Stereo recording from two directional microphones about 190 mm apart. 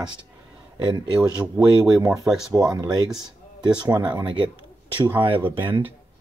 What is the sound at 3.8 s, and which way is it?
Speech, 20° right (ahead or behind).